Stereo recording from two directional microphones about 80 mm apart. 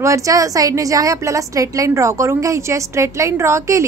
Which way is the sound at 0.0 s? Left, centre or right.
Right.